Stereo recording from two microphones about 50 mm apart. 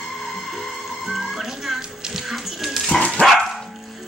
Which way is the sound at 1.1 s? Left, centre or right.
Centre.